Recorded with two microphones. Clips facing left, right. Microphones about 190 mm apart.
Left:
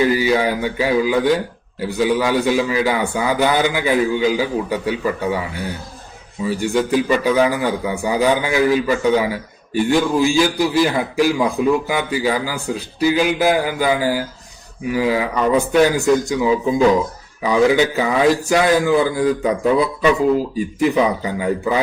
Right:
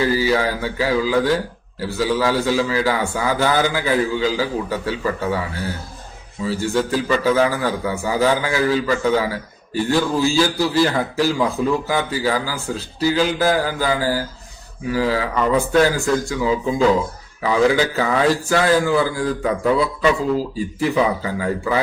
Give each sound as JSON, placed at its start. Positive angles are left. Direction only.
{"t": 0.0, "sound": "a man's voice", "side_deg": 15}
{"t": 6.4, "sound": "a man's voice", "side_deg": 15}
{"t": 20.7, "sound": "a man's voice", "side_deg": 20}